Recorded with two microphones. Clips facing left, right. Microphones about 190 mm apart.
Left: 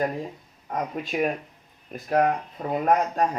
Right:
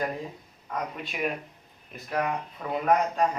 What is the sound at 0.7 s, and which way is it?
Speech, 45° left (ahead or behind).